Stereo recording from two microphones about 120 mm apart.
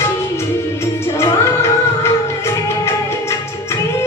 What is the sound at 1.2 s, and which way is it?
Music, 20° left (ahead or behind).